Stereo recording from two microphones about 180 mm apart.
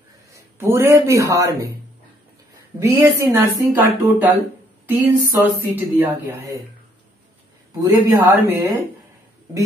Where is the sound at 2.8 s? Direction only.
15° right (ahead or behind).